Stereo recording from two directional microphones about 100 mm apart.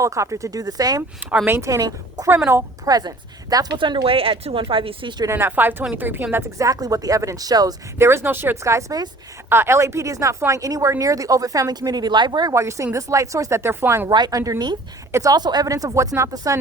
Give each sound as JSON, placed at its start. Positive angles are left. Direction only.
{"t": 0.0, "sound": "speech", "side_deg": -30}
{"t": 1.5, "sound": "speech", "side_deg": -30}
{"t": 3.8, "sound": "speech", "side_deg": -55}
{"t": 5.3, "sound": "speech", "side_deg": -20}
{"t": 6.6, "sound": "speech", "side_deg": -35}
{"t": 7.9, "sound": "speech", "side_deg": -25}
{"t": 12.5, "sound": "speech", "side_deg": -30}
{"t": 14.1, "sound": "speech", "side_deg": -40}